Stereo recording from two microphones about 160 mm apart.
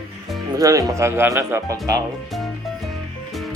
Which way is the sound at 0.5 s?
20° right (ahead or behind).